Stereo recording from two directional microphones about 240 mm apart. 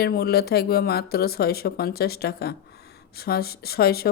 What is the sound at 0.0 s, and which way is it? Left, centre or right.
Speech, left.